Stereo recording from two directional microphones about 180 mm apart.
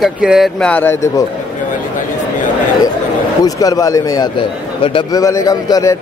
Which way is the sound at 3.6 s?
20° left (ahead or behind).